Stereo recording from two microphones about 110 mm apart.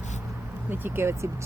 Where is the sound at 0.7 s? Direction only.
20° right (ahead or behind).